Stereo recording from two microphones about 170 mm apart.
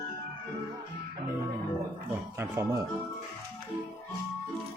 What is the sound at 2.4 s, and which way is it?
Speech, 15° right (ahead or behind).